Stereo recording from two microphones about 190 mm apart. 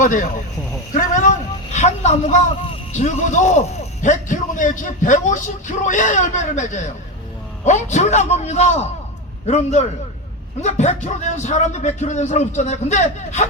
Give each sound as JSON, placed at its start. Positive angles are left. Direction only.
{"t": 0.0, "sound": "speech", "side_deg": 45}
{"t": 0.9, "sound": "a sound", "side_deg": 40}
{"t": 3.0, "sound": "a man's voice", "side_deg": 40}